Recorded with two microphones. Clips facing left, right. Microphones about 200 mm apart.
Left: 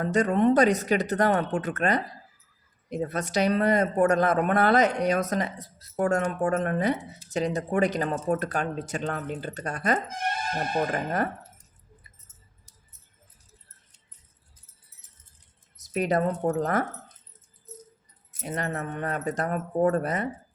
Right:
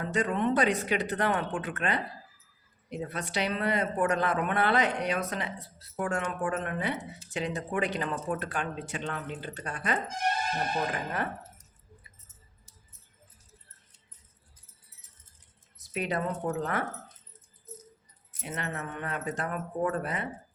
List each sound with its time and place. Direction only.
0.0 s speech: 40° left (ahead or behind)
15.8 s speech: 40° left (ahead or behind)
18.4 s speech: 40° left (ahead or behind)